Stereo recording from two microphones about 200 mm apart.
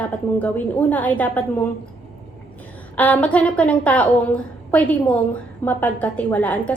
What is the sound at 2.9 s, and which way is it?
A woman's voice, 10° left (ahead or behind).